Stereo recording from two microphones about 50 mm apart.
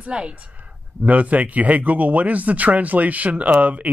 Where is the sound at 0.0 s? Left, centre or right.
Right.